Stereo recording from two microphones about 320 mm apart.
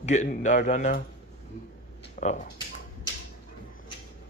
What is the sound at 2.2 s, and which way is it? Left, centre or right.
Speech, left.